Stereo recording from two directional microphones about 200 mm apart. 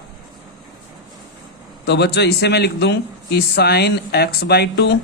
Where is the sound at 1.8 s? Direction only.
55° left (ahead or behind).